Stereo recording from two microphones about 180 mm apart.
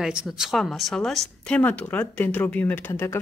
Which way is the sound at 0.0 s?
5° right (ahead or behind).